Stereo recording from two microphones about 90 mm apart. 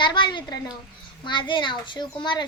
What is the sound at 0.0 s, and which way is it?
A woman's voice, 60° left (ahead or behind).